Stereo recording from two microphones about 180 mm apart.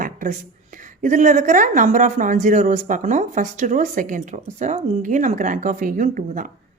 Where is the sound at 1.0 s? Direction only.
45° right (ahead or behind).